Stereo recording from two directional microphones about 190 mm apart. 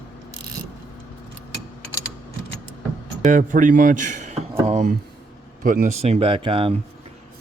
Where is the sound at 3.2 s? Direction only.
45° right (ahead or behind).